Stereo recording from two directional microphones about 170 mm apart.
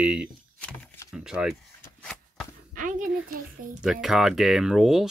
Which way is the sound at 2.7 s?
50° right (ahead or behind).